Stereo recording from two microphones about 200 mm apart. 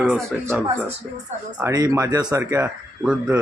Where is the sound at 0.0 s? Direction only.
Centre (ahead or behind).